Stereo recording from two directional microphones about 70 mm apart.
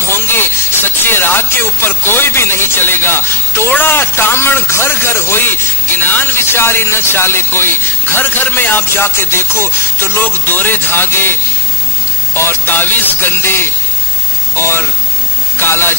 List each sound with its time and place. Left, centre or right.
0.1 s speech: left
12.4 s speech: left